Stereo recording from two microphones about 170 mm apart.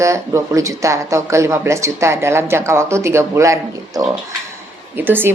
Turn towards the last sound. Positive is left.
turn(degrees=-10)  # may be behind; listen again after turning